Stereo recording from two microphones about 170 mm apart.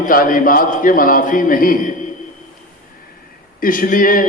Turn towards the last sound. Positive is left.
turn(degrees=55)  # may be behind; listen again after turning